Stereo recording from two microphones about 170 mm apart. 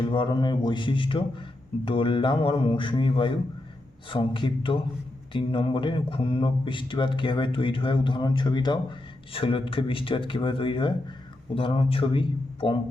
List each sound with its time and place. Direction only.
0.0 s speech: 30° left (ahead or behind)